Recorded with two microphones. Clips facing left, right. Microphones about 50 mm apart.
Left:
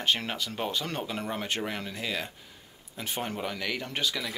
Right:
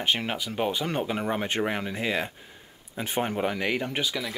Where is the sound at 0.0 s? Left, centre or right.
Centre.